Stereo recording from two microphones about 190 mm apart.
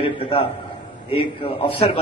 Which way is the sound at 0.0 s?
30° left (ahead or behind).